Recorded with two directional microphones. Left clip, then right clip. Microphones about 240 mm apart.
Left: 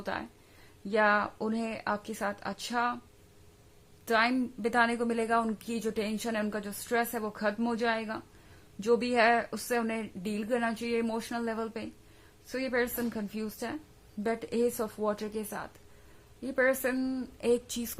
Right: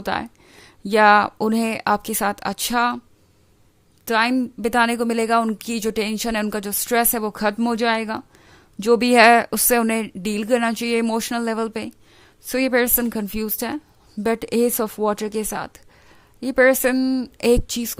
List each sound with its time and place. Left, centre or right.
0.0 s speech: right
4.0 s a woman's voice: right